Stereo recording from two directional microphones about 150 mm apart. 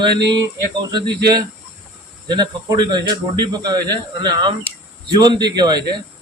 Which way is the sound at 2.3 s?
30° right (ahead or behind).